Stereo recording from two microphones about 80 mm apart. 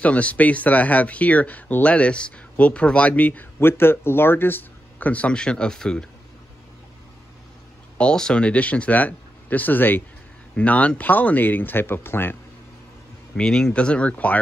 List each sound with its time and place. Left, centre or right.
0.0 s speech: centre
8.0 s speech: centre; by 12.4 s left
13.4 s speech: centre